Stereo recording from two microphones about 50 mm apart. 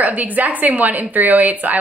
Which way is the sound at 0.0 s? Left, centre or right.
Right.